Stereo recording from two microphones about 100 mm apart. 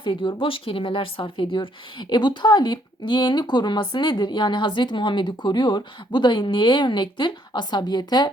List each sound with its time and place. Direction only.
0.0 s speech: 55° left (ahead or behind)